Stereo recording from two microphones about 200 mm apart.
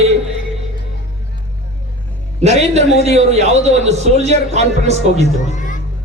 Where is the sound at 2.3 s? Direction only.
35° right (ahead or behind).